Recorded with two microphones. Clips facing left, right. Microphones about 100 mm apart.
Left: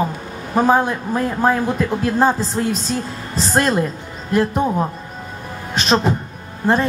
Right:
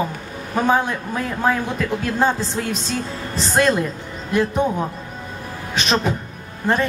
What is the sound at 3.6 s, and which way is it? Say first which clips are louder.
Speech: even; 10° left (ahead or behind).